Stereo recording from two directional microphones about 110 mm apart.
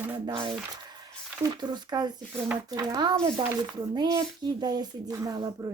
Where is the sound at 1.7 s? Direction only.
40° right (ahead or behind).